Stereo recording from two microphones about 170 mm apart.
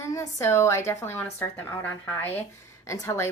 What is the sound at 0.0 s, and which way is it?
Speech, 15° left (ahead or behind).